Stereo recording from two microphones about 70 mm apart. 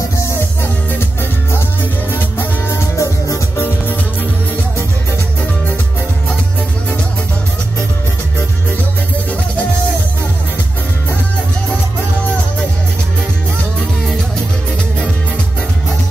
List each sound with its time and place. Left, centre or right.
2.7 s music: left